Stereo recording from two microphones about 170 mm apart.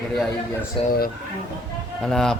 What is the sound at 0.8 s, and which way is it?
Speech, 35° left (ahead or behind).